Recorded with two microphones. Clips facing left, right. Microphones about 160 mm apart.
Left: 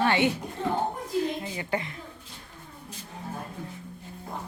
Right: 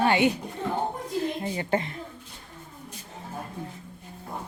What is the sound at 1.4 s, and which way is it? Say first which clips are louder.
Speech: right 4 dB; 35° right (ahead or behind).